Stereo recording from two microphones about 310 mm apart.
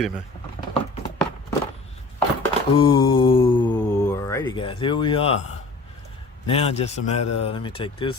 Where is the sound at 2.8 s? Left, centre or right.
Centre.